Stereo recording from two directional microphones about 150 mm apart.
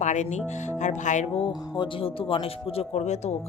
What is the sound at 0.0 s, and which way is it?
Speech, 50° left (ahead or behind).